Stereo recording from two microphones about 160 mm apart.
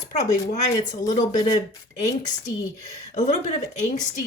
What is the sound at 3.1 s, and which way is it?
Speech, 45° left (ahead or behind).